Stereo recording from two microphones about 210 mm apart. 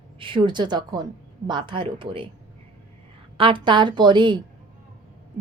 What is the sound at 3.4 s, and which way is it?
Speech, 25° right (ahead or behind).